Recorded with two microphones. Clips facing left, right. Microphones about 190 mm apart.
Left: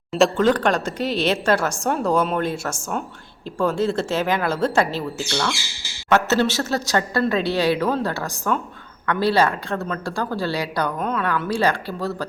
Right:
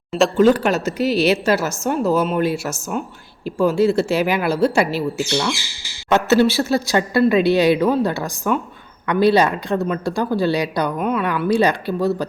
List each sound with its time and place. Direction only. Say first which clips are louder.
0.3 s a woman's voice: right 4 dB; 10° right (ahead or behind)